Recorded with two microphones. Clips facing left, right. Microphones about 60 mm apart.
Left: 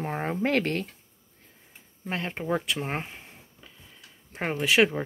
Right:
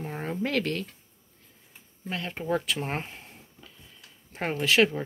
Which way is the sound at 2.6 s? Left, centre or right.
Centre.